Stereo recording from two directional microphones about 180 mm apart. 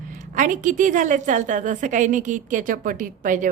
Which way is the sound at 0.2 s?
45° right (ahead or behind).